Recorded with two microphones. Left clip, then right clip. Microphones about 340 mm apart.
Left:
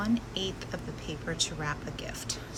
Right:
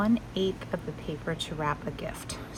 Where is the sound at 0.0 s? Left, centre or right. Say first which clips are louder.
Right 4 dB; centre.